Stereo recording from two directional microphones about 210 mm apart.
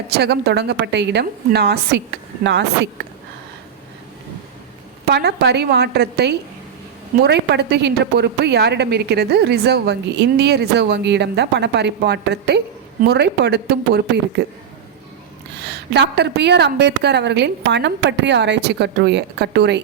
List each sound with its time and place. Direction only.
0.1 s a woman's voice: 50° right (ahead or behind)
5.0 s a woman's voice: 50° right (ahead or behind)
15.6 s a woman's voice: 50° right (ahead or behind)